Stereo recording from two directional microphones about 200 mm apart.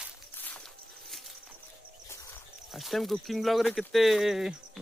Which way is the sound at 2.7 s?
Centre (ahead or behind).